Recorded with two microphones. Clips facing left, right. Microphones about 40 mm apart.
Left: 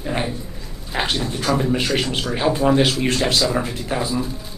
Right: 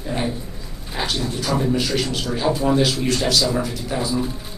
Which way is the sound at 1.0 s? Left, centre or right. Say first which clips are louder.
Left 2 dB; left.